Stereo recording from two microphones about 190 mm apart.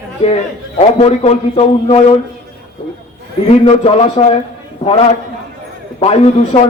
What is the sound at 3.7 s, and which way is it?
Speech, 35° left (ahead or behind).